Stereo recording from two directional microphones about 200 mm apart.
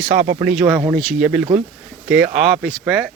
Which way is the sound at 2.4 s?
Centre (ahead or behind).